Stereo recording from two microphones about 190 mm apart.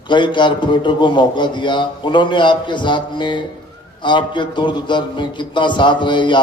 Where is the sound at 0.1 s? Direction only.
25° left (ahead or behind).